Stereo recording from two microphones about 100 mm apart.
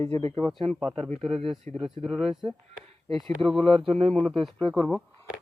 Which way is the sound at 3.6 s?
60° right (ahead or behind).